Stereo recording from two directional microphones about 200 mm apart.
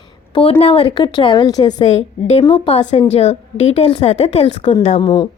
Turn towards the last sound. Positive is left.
turn(degrees=20)  # may be behind; listen again after turning